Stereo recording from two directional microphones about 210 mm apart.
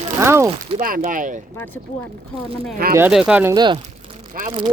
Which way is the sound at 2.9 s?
5° right (ahead or behind).